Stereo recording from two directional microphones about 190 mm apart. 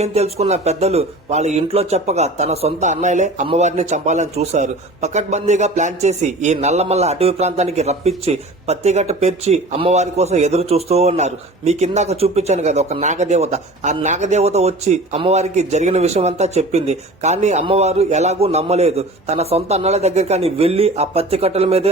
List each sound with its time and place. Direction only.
0.0 s speech: 35° right (ahead or behind)